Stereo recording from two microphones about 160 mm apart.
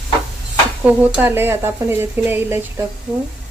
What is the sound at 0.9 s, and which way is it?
Speech, 10° right (ahead or behind).